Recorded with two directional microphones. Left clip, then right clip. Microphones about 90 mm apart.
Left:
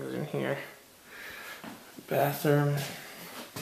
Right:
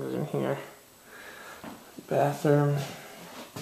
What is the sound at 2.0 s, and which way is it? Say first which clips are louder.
Speech: right 2 dB; centre (ahead or behind).